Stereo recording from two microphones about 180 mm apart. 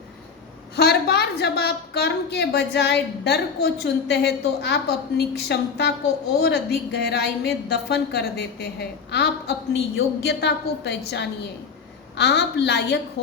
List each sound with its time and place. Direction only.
0.8 s a woman's voice: 60° left (ahead or behind)